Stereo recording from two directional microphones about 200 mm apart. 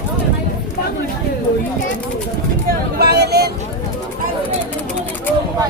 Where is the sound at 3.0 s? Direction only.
55° right (ahead or behind).